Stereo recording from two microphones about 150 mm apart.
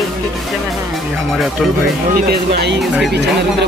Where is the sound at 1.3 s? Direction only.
Centre (ahead or behind).